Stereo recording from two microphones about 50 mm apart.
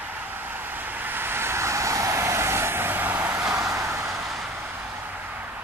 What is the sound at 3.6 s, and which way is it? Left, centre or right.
Vehicle, right.